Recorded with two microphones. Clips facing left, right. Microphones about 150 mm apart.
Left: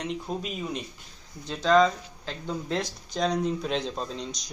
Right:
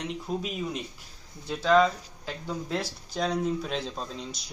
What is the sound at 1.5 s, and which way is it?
A man's voice, 10° right (ahead or behind).